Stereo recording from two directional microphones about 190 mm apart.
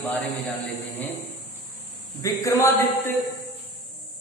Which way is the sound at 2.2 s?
15° left (ahead or behind).